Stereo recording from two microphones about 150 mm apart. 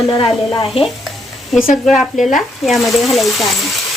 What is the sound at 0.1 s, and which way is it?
Speech, 30° left (ahead or behind).